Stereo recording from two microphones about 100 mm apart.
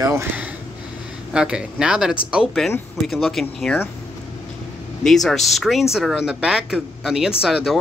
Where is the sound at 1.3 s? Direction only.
10° right (ahead or behind).